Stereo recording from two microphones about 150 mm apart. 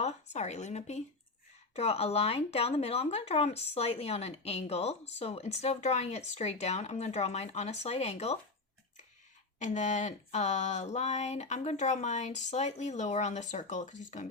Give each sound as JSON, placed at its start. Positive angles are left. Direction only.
{"t": 0.0, "sound": "speech", "side_deg": 50}
{"t": 9.6, "sound": "speech", "side_deg": 55}